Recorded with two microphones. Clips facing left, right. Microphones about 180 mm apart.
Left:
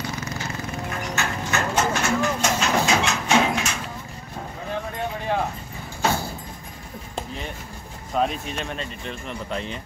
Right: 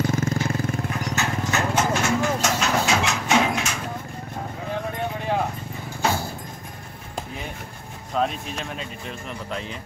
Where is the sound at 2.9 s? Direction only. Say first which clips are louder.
Left 1 dB; centre (ahead or behind).